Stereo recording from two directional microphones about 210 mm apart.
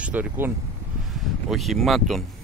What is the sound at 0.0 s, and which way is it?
Speech, 5° right (ahead or behind).